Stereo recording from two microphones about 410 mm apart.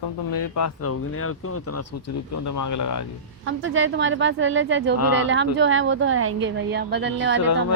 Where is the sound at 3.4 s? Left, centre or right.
Right.